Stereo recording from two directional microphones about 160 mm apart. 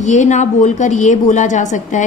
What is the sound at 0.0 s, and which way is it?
A woman's voice, 50° left (ahead or behind).